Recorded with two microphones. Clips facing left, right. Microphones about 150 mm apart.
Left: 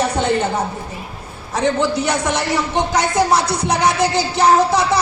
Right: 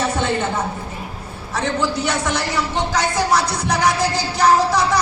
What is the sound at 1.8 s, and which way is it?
A man's voice, 20° left (ahead or behind).